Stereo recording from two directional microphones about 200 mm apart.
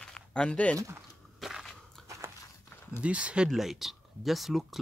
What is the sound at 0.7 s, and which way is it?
Speech, 15° right (ahead or behind).